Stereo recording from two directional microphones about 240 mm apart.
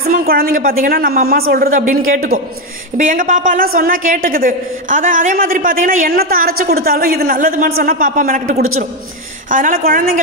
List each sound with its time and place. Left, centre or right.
0.1 s a man's voice: right